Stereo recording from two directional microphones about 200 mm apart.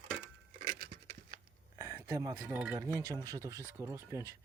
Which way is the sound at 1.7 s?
15° right (ahead or behind).